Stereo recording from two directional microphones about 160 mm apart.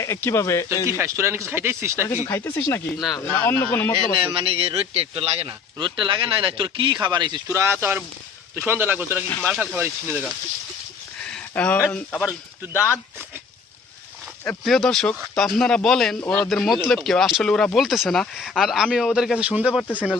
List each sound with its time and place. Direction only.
0.0 s speech: 20° left (ahead or behind)
0.9 s speech: 15° right (ahead or behind)
2.2 s speech: 15° left (ahead or behind)
3.9 s a man's voice: 35° right (ahead or behind); by 10.2 s 15° right (ahead or behind)
11.3 s a sound: 5° left (ahead or behind)
11.9 s speech: 5° left (ahead or behind)
14.6 s speech: centre (ahead or behind)